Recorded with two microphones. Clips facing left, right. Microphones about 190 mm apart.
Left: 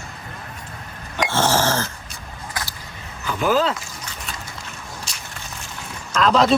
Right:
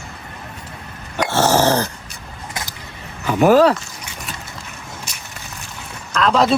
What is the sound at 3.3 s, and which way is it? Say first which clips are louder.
Speech: right 8 dB; 70° right (ahead or behind).